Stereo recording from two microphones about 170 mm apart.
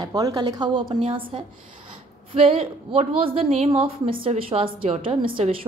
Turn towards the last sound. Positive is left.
turn(degrees=-30)  # may be behind; listen again after turning